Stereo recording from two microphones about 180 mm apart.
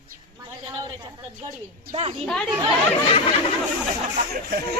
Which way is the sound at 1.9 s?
35° right (ahead or behind).